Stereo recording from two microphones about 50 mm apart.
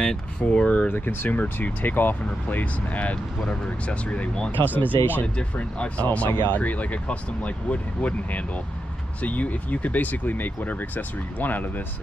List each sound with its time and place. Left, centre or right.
0.5 s speech: left
0.9 s speech: left
4.7 s speech: left
5.2 s speech: left